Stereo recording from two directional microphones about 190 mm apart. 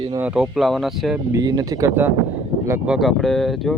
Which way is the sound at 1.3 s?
20° right (ahead or behind).